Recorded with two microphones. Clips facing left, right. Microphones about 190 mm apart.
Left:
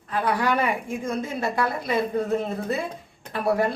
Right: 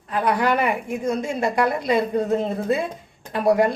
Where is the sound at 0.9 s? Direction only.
80° right.